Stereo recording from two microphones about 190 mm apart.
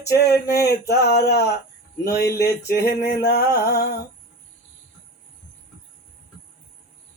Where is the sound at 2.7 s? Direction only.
55° left (ahead or behind).